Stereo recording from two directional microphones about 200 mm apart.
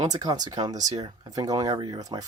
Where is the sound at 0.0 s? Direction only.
20° right (ahead or behind).